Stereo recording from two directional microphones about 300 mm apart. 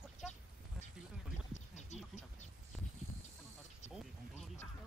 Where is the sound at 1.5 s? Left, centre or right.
Left.